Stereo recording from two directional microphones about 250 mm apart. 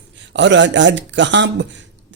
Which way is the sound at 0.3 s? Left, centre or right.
Right.